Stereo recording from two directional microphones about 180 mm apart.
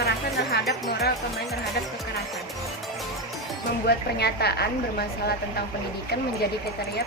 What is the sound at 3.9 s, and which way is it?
Speech, 65° left (ahead or behind).